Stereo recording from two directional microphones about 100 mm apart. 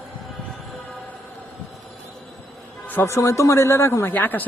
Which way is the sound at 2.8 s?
25° left (ahead or behind).